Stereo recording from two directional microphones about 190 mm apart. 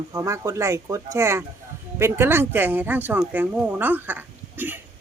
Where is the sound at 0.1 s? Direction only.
15° right (ahead or behind).